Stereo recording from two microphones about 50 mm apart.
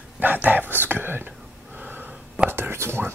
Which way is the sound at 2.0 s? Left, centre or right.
Right.